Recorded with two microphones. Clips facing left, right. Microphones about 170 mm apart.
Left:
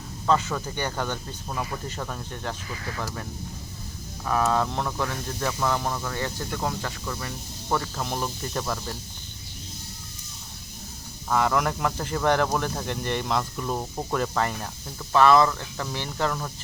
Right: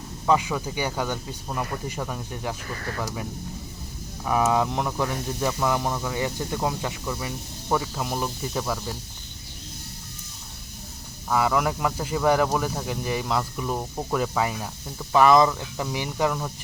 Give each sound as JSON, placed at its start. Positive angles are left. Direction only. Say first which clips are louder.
{"t": 0.3, "sound": "speech", "louder": "right 1 dB", "side_deg": -10}
{"t": 2.6, "sound": "speech", "louder": "right 2 dB", "side_deg": -50}
{"t": 3.0, "sound": "speech", "louder": "right 2 dB", "side_deg": -10}
{"t": 4.3, "sound": "speech", "louder": "right 2 dB", "side_deg": -15}
{"t": 11.3, "sound": "speech", "louder": "right 1 dB", "side_deg": -5}